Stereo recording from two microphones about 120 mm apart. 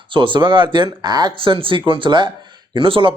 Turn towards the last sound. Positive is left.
turn(degrees=-45)  # may be behind; listen again after turning